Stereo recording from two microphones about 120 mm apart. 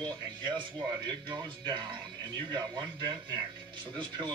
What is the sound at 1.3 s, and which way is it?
Speech, 40° right (ahead or behind).